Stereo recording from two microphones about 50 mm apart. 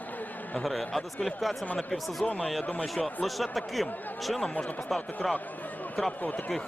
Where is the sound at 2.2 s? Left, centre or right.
Left.